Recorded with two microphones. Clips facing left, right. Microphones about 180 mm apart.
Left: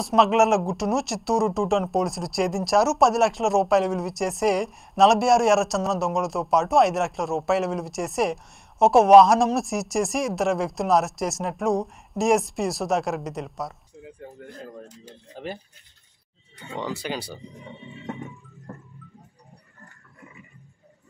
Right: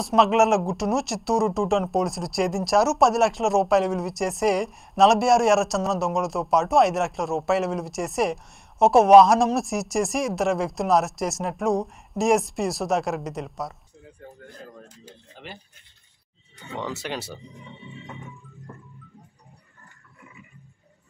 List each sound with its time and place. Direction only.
0.0 s speech: centre (ahead or behind)
15.4 s speech: 40° left (ahead or behind)
16.8 s speech: centre (ahead or behind)